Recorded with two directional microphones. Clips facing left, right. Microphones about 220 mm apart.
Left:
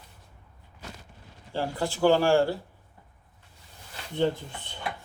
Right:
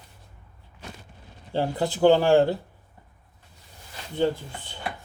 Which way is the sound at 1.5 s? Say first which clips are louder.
Right 4 dB; 20° right (ahead or behind).